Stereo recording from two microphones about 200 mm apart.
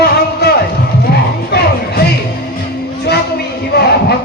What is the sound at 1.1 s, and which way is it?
Music, 55° left (ahead or behind).